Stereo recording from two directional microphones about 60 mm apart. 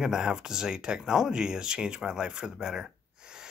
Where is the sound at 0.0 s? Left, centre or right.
Centre.